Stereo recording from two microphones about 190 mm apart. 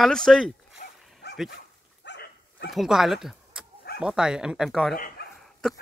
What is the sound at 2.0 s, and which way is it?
Dog, 65° left (ahead or behind).